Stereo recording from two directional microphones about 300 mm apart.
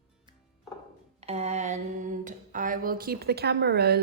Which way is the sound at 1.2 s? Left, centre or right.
Right.